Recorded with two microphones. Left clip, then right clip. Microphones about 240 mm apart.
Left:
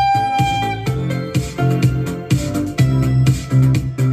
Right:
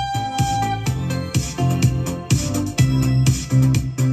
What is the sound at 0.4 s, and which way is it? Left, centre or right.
Music, right.